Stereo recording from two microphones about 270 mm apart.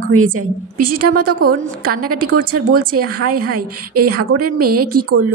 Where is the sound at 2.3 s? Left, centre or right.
Right.